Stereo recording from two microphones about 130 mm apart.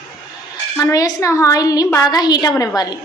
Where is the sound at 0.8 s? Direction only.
25° left (ahead or behind).